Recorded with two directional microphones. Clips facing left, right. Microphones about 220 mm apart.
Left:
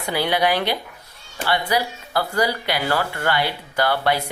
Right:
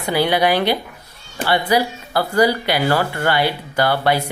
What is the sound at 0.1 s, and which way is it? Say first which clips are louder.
Speech: right 4 dB; 35° right (ahead or behind).